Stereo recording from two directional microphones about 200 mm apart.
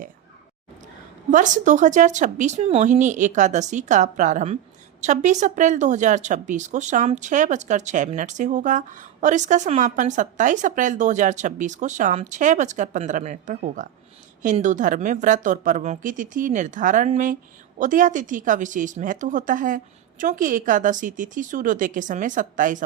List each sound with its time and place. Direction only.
1.3 s speech: 40° right (ahead or behind)